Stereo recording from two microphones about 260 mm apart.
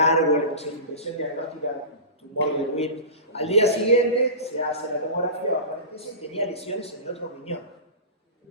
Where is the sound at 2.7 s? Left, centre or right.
Left.